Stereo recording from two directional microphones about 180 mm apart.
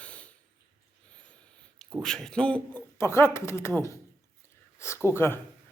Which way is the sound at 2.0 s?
5° left (ahead or behind).